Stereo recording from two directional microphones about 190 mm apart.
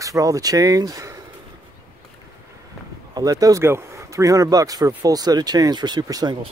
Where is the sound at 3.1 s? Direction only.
20° right (ahead or behind).